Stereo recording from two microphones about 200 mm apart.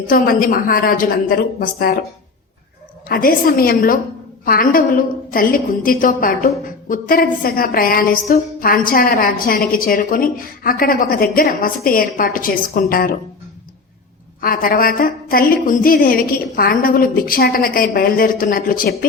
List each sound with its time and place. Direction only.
0.1 s a woman's voice: 45° left (ahead or behind)
3.1 s a woman's voice: 45° left (ahead or behind)
14.4 s a woman's voice: 45° left (ahead or behind)